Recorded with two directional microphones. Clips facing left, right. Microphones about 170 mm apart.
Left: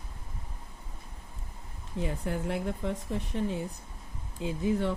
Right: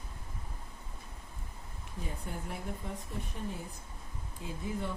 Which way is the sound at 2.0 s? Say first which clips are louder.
Left 9 dB; 85° left.